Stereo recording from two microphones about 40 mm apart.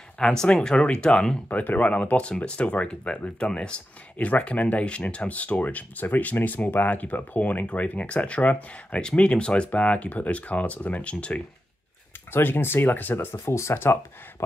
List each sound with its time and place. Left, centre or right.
0.2 s speech: centre
0.7 s speech: left
1.5 s speech: left
4.2 s speech: left
12.3 s speech: left